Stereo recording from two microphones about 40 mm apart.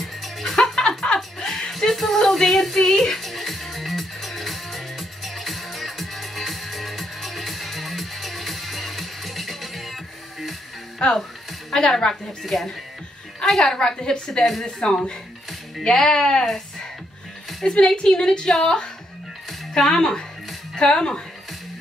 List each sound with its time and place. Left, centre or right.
0.0 s music: centre
11.0 s a woman's voice: centre
17.6 s a woman's voice: left